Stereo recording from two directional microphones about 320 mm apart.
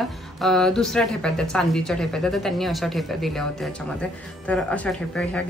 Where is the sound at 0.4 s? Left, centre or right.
Centre.